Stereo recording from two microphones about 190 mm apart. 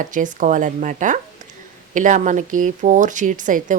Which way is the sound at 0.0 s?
45° right (ahead or behind).